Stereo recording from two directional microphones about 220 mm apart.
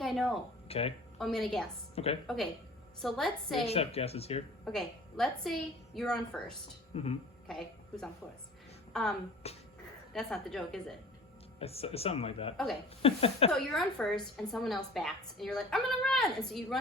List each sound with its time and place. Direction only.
0.7 s speech: 25° left (ahead or behind)
1.2 s a woman's voice: centre (ahead or behind)
3.7 s speech: 25° left (ahead or behind)
4.6 s a woman's voice: centre (ahead or behind)
6.9 s speech: 25° left (ahead or behind)
7.4 s a woman's voice: centre (ahead or behind)
9.4 s music: 30° left (ahead or behind)
10.1 s a woman's voice: centre (ahead or behind)
11.6 s speech: 25° left (ahead or behind)
13.5 s a woman's voice: centre (ahead or behind)